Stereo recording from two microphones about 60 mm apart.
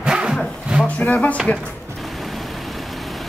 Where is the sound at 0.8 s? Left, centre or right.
Left.